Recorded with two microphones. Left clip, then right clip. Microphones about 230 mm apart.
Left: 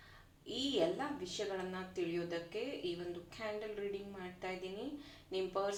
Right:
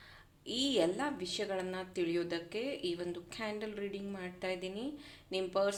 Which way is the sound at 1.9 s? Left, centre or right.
Right.